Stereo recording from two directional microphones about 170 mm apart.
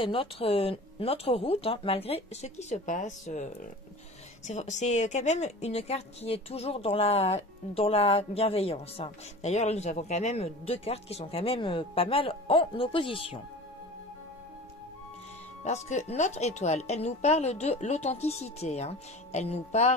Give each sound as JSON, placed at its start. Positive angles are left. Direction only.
{"t": 0.0, "sound": "speech", "side_deg": 30}
{"t": 15.6, "sound": "speech", "side_deg": 40}